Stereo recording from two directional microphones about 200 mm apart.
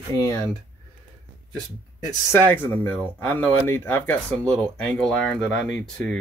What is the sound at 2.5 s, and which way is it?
Speech, 10° left (ahead or behind).